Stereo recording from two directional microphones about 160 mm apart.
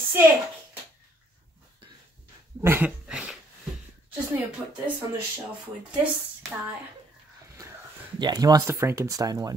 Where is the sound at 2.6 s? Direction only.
10° right (ahead or behind).